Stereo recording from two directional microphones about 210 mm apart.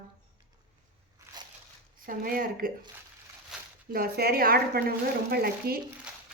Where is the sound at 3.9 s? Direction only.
45° right (ahead or behind).